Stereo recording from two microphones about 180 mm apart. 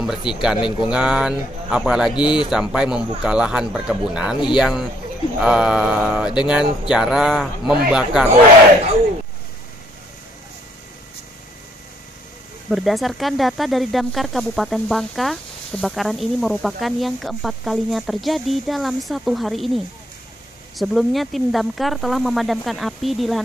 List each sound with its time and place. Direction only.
0.0 s speech: 5° right (ahead or behind)
0.6 s speech: 25° left (ahead or behind)
0.9 s speech: 5° right (ahead or behind)
12.7 s speech: centre (ahead or behind)